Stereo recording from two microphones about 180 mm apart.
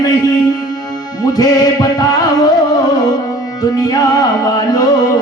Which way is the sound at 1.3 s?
20° left (ahead or behind).